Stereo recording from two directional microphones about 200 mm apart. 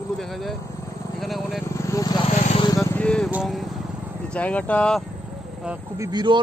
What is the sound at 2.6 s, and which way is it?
Speech, 15° left (ahead or behind).